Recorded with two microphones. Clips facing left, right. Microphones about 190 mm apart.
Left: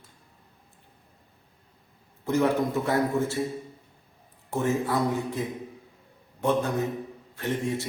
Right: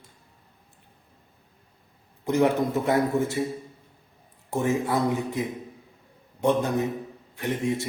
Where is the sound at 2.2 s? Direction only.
20° right (ahead or behind).